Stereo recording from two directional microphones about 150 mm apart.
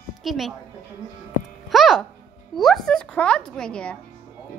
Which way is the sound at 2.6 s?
Centre (ahead or behind).